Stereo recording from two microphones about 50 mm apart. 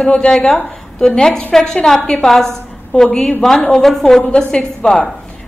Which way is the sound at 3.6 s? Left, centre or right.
Left.